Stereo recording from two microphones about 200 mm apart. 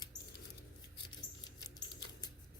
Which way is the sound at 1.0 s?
20° left (ahead or behind).